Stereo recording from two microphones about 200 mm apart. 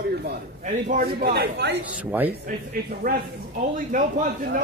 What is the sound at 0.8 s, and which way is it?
Speech, 45° right (ahead or behind).